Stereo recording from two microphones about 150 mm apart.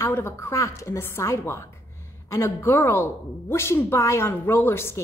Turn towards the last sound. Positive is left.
turn(degrees=15)  # may be behind; listen again after turning